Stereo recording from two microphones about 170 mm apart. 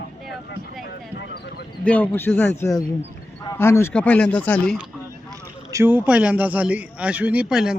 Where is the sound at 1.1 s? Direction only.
80° left.